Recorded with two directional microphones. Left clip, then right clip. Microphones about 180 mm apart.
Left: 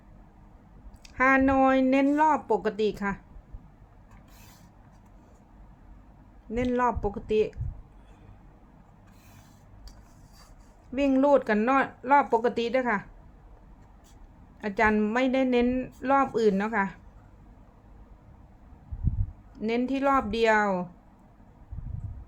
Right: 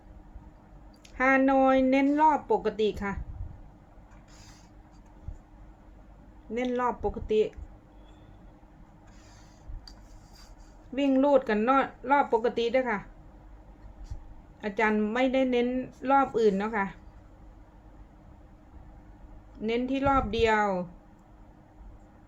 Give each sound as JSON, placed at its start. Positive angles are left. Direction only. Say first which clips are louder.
{"t": 1.0, "sound": "a woman's voice", "louder": "left 1 dB", "side_deg": 15}
{"t": 6.5, "sound": "a woman's voice", "louder": "left 3 dB", "side_deg": 15}
{"t": 10.9, "sound": "a woman's voice", "louder": "left 1 dB", "side_deg": 15}
{"t": 14.6, "sound": "a woman's voice", "louder": "left 2 dB", "side_deg": 20}
{"t": 19.5, "sound": "a woman's voice", "louder": "left 1 dB", "side_deg": 15}